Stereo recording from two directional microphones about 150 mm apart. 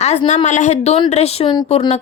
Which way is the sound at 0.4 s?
50° left (ahead or behind).